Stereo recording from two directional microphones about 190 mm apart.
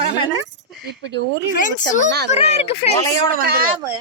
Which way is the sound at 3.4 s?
55° right (ahead or behind).